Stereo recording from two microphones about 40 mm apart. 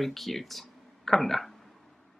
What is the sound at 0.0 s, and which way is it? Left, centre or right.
Speech, centre.